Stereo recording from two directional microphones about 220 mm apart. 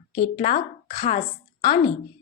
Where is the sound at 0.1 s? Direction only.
30° left (ahead or behind).